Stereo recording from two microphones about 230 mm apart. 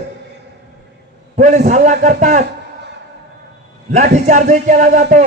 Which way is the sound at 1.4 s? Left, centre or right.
Right.